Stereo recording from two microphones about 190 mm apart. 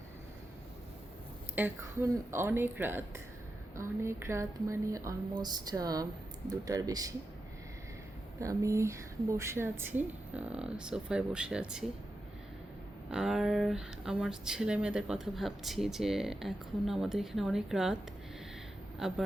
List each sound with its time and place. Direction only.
1.5 s a woman's voice: 10° right (ahead or behind)
8.4 s a woman's voice: 15° right (ahead or behind)
13.1 s speech: 5° right (ahead or behind)
18.9 s speech: centre (ahead or behind)